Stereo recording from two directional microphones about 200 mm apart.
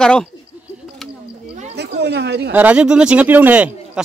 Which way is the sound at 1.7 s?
55° right (ahead or behind).